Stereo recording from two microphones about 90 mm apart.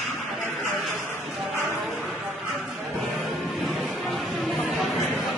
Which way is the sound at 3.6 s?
Centre (ahead or behind).